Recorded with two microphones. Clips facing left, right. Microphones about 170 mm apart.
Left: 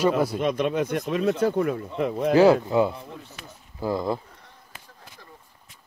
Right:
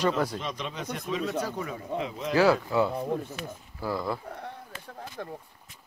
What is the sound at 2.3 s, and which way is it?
Speech, 20° left (ahead or behind).